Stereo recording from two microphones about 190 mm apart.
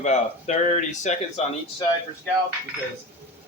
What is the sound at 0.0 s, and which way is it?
A man's voice, 35° left (ahead or behind).